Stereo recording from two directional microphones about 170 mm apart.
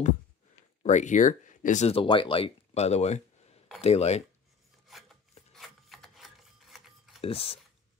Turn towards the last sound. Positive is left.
turn(degrees=35)  # may be behind; listen again after turning